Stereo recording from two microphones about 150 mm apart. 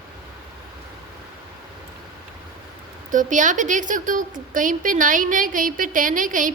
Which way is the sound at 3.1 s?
60° right (ahead or behind).